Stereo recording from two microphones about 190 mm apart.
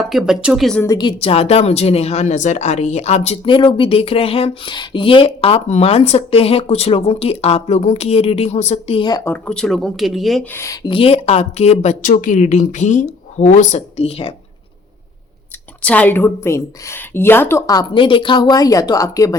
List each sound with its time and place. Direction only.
0.0 s speech: centre (ahead or behind)
0.8 s a woman's voice: 20° left (ahead or behind); by 10.4 s centre (ahead or behind)
10.5 s a woman's voice: 15° left (ahead or behind)
10.8 s a woman's voice: 30° left (ahead or behind)
15.8 s a woman's voice: 10° left (ahead or behind)